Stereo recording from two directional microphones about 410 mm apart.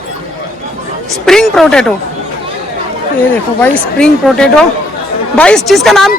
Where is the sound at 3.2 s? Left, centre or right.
Centre.